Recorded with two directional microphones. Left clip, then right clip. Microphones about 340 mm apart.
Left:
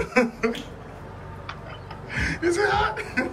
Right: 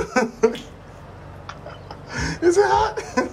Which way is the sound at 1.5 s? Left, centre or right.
Centre.